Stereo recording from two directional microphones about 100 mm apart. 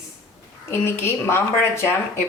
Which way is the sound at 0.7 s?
25° left (ahead or behind).